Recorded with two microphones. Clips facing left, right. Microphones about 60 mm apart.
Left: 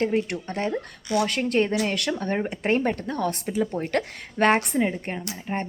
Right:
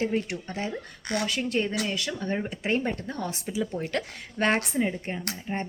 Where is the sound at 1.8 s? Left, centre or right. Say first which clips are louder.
Left 4 dB; left.